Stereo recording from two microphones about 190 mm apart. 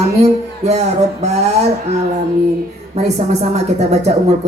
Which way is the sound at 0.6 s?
35° right (ahead or behind).